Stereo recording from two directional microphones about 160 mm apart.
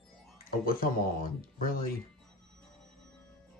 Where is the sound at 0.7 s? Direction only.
60° left (ahead or behind).